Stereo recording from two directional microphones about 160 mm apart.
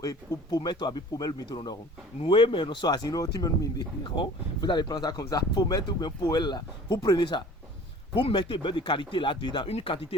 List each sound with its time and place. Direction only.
0.0 s a man's voice: 25° left (ahead or behind)